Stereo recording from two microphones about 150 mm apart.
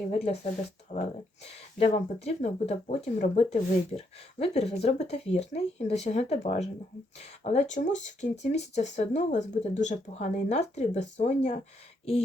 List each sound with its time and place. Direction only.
0.1 s speech: 45° left (ahead or behind)